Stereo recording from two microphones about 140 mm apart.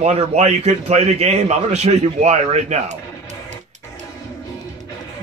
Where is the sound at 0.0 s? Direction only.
50° right (ahead or behind).